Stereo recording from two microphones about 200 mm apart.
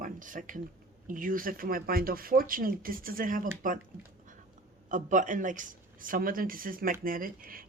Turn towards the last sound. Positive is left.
turn(degrees=-45)  # may be behind; listen again after turning